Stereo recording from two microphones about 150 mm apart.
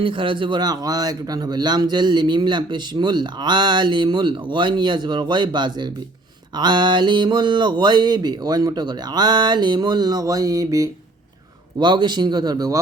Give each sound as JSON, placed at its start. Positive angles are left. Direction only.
{"t": 0.0, "sound": "speech", "side_deg": -35}